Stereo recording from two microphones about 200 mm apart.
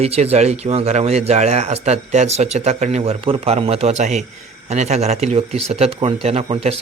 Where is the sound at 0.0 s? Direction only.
30° right (ahead or behind).